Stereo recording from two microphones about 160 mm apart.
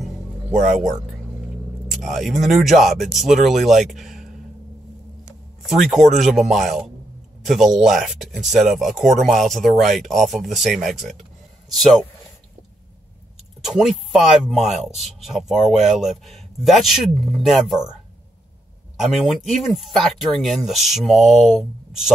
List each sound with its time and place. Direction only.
0.6 s speech: 50° right (ahead or behind)
1.9 s speech: centre (ahead or behind)
5.7 s speech: centre (ahead or behind)
13.7 s speech: 5° right (ahead or behind)
18.9 s speech: centre (ahead or behind)